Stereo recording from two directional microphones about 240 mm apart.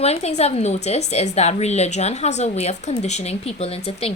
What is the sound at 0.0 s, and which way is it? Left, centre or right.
A woman's voice, left.